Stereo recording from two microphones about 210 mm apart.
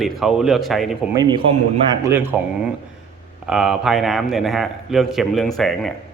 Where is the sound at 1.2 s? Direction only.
20° right (ahead or behind).